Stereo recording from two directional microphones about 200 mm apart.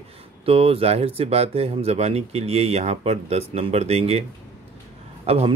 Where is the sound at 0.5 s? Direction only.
30° right (ahead or behind).